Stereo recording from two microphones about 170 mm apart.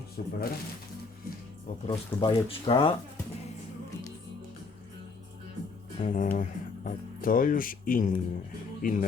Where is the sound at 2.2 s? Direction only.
30° left (ahead or behind).